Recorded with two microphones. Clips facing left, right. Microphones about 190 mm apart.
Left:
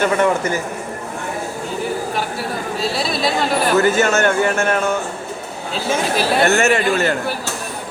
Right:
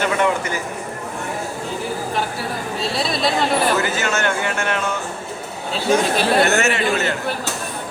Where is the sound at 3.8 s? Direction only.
45° left (ahead or behind).